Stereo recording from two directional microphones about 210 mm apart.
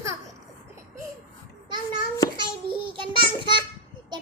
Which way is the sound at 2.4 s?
25° right (ahead or behind).